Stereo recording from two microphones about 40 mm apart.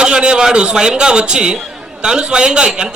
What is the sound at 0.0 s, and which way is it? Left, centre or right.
A man's voice, right.